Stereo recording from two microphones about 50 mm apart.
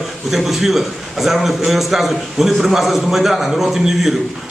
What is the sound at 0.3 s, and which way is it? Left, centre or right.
A man's voice, centre.